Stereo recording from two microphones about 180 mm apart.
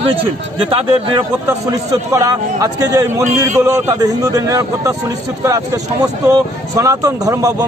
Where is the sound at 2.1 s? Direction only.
15° right (ahead or behind).